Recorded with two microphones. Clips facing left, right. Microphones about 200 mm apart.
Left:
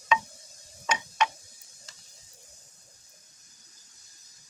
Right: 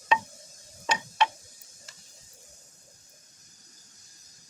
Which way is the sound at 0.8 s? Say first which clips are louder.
Right 1 dB; 35° right (ahead or behind).